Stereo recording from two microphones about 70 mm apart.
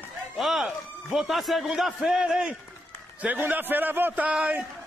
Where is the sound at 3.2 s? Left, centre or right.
Right.